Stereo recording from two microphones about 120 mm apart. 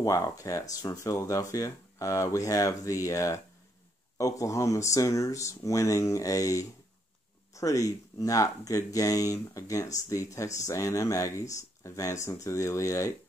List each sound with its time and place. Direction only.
0.0 s speech: 25° left (ahead or behind)